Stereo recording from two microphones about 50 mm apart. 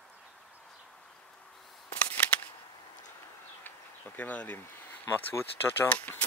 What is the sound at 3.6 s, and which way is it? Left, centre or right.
Insect, left.